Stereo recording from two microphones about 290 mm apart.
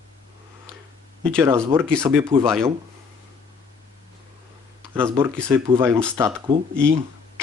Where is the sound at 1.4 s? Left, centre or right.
Centre.